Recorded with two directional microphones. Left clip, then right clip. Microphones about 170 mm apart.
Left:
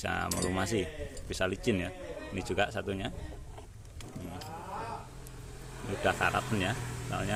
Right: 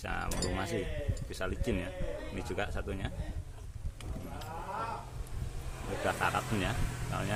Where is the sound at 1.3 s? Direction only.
35° left (ahead or behind).